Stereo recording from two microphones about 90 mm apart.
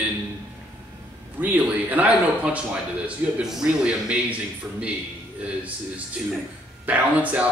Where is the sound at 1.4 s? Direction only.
20° right (ahead or behind).